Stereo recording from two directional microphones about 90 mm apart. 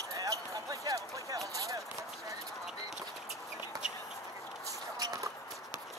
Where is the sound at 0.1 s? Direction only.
40° right (ahead or behind).